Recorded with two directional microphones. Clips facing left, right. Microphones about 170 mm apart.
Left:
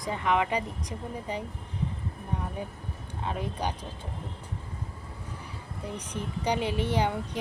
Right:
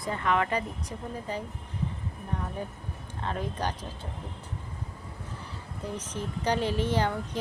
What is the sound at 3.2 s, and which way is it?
Speech, 10° left (ahead or behind).